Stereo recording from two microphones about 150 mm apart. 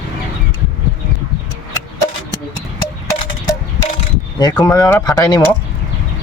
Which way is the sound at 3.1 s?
20° left (ahead or behind).